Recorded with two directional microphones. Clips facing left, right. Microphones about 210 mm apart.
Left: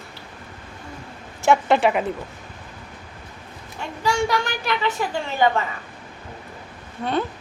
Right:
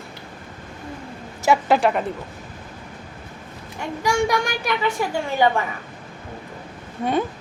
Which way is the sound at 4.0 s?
15° right (ahead or behind).